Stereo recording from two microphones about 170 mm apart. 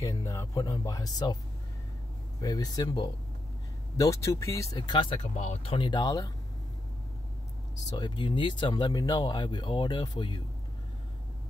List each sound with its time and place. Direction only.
0.0 s speech: 20° left (ahead or behind)
2.4 s speech: 20° left (ahead or behind)
4.7 s speech: 30° left (ahead or behind)
5.3 s speech: 45° left (ahead or behind); by 6.3 s 25° left (ahead or behind)
7.9 s speech: 25° left (ahead or behind)